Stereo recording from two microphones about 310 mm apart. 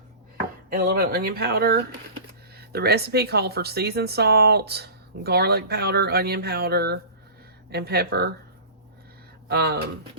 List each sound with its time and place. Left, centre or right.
0.7 s speech: right
9.5 s speech: right